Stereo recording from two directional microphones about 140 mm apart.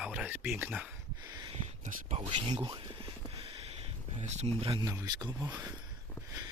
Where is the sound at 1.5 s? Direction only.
55° right (ahead or behind); by 3.8 s 40° right (ahead or behind).